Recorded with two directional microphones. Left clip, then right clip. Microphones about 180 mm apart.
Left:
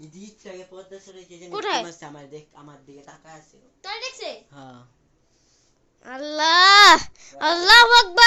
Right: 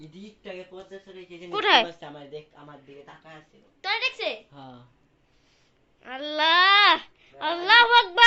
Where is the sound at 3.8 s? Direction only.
40° right (ahead or behind).